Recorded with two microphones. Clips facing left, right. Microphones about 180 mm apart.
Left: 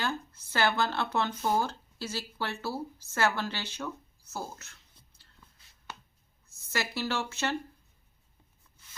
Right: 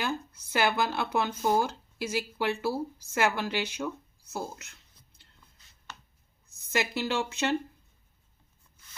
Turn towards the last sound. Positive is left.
turn(degrees=-15)  # may be behind; listen again after turning